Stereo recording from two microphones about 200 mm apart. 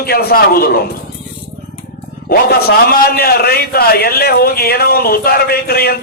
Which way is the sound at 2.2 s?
50° left (ahead or behind).